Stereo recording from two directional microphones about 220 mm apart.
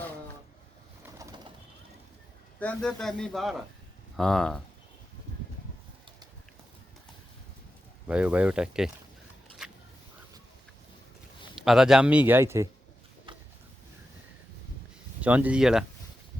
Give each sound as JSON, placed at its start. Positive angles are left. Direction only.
{"t": 2.6, "sound": "speech", "side_deg": 5}
{"t": 8.0, "sound": "speech", "side_deg": -5}
{"t": 9.6, "sound": "a sound", "side_deg": 0}
{"t": 11.5, "sound": "speech", "side_deg": 0}
{"t": 15.2, "sound": "speech", "side_deg": -5}